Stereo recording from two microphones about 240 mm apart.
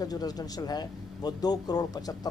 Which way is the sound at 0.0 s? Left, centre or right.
Centre.